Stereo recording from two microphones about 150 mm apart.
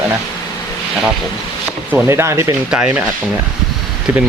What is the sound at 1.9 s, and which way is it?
Speech, 15° right (ahead or behind).